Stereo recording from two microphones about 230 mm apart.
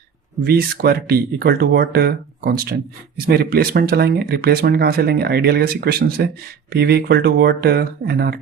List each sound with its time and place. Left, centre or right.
0.4 s speech: right